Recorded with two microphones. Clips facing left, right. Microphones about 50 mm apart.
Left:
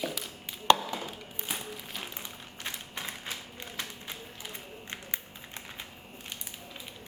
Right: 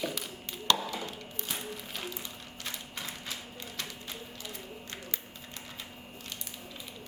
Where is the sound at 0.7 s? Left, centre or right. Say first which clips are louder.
Left 6 dB; left.